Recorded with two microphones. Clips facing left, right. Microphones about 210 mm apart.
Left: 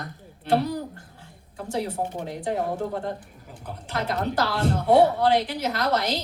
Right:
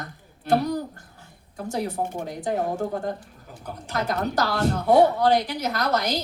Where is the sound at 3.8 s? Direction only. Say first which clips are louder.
Right 1 dB; 45° right (ahead or behind).